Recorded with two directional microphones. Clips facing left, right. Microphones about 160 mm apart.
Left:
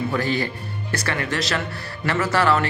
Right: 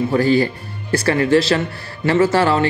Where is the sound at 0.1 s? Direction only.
35° right (ahead or behind).